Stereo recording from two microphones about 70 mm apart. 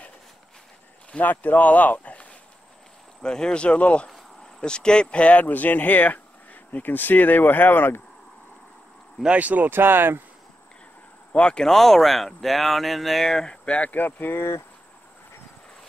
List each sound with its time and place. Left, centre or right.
1.1 s speech: left
3.2 s speech: centre; by 8.0 s left
9.2 s speech: centre
11.3 s speech: centre; by 14.6 s left